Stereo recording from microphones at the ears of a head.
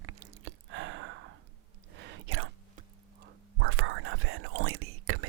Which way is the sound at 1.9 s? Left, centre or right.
Right.